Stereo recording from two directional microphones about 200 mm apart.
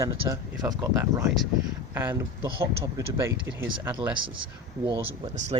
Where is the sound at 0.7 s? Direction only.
15° right (ahead or behind).